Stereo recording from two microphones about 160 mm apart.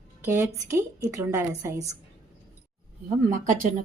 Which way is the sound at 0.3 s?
15° right (ahead or behind).